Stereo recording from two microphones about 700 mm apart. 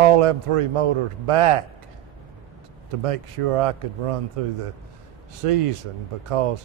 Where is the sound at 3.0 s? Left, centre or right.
Right.